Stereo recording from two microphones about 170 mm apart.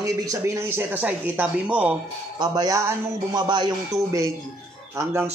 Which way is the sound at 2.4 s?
25° right (ahead or behind).